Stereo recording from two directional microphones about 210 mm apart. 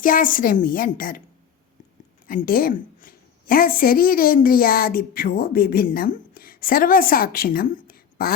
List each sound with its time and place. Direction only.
0.0 s a woman's voice: 40° left (ahead or behind)
2.2 s a woman's voice: 40° left (ahead or behind)